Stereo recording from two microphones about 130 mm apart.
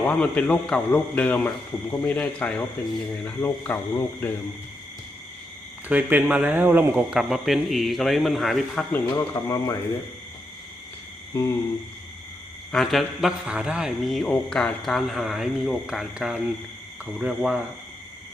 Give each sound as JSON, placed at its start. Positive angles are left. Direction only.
{"t": 0.1, "sound": "a man's voice", "side_deg": 10}
{"t": 5.9, "sound": "speech", "side_deg": -15}
{"t": 7.1, "sound": "speech", "side_deg": -5}
{"t": 9.0, "sound": "speech", "side_deg": 25}
{"t": 11.3, "sound": "speech", "side_deg": 25}
{"t": 12.7, "sound": "speech", "side_deg": 0}